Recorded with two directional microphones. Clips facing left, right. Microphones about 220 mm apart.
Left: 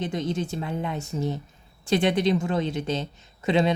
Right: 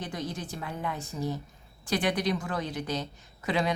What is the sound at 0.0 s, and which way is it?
A woman's voice, 25° left (ahead or behind).